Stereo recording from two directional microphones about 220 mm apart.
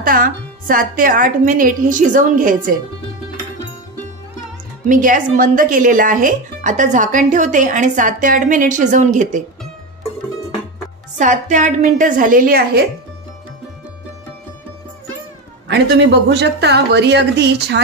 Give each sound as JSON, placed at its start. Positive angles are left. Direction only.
{"t": 0.0, "sound": "speech", "side_deg": -40}
{"t": 4.8, "sound": "speech", "side_deg": -35}
{"t": 11.1, "sound": "speech", "side_deg": -35}
{"t": 15.7, "sound": "speech", "side_deg": -50}